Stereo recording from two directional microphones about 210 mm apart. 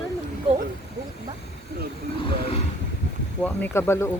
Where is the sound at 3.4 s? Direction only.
10° left (ahead or behind).